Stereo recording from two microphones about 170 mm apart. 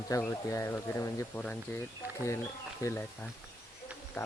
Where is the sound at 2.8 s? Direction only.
15° left (ahead or behind).